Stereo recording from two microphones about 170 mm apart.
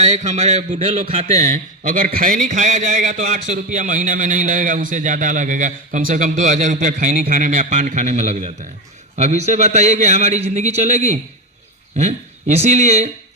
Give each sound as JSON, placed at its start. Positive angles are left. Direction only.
{"t": 0.2, "sound": "a man's voice", "side_deg": -40}